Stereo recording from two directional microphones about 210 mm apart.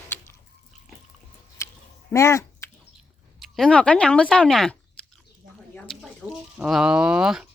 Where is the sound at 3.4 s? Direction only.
5° left (ahead or behind).